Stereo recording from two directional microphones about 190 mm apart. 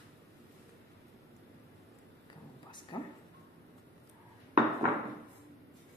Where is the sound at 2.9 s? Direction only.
25° left (ahead or behind).